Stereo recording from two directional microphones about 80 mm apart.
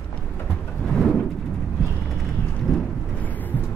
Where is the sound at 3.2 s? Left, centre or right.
Left.